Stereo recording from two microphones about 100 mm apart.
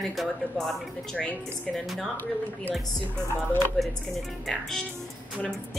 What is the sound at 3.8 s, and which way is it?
A woman's voice, centre (ahead or behind).